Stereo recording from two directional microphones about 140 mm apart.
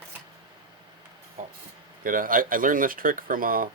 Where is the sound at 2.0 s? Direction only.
80° right.